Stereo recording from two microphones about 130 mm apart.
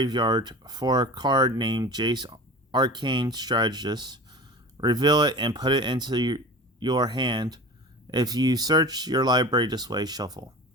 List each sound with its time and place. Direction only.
0.0 s speech: 35° right (ahead or behind)